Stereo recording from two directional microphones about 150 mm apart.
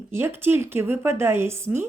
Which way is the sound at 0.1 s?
15° right (ahead or behind).